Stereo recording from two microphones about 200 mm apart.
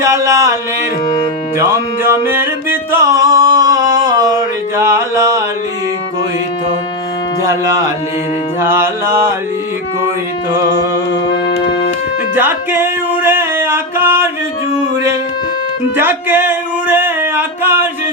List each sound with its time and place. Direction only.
0.0 s music: 15° right (ahead or behind)
1.0 s music: 20° left (ahead or behind)
1.5 s music: 15° right (ahead or behind)
8.6 s music: 10° right (ahead or behind)
12.3 s music: 10° right (ahead or behind)
16.0 s a sound: 10° right (ahead or behind)